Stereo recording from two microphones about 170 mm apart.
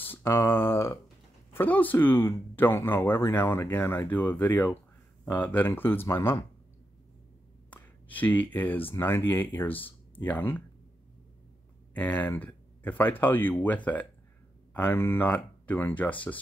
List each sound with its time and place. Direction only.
0.0 s speech: 10° left (ahead or behind)
7.7 s speech: 10° left (ahead or behind)
11.9 s speech: 10° left (ahead or behind)